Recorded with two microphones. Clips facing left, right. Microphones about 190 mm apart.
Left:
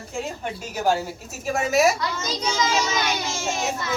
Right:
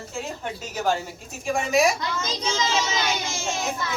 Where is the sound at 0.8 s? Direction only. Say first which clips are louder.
Left 3 dB; 5° left (ahead or behind).